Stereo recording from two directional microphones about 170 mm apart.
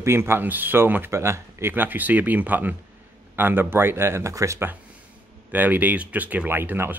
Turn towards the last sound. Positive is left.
turn(degrees=-10)  # may be behind; listen again after turning